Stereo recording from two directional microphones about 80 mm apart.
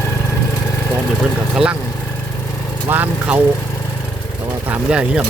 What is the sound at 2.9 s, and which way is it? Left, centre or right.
Speech, right.